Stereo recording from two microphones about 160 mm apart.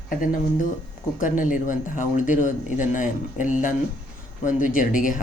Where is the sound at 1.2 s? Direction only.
55° left (ahead or behind).